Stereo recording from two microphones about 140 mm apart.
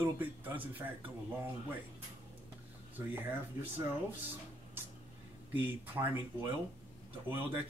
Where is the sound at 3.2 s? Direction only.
15° right (ahead or behind).